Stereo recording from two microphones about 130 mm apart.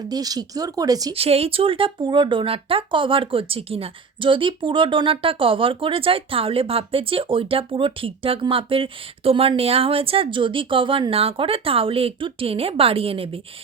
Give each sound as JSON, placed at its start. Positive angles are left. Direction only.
{"t": 0.1, "sound": "speech", "side_deg": -30}
{"t": 1.1, "sound": "speech", "side_deg": -50}